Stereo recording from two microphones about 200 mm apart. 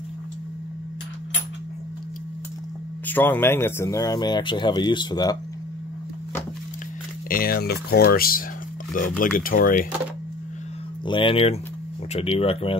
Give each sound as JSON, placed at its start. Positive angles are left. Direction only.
{"t": 3.1, "sound": "speech", "side_deg": 10}
{"t": 7.2, "sound": "speech", "side_deg": 45}
{"t": 11.1, "sound": "speech", "side_deg": 25}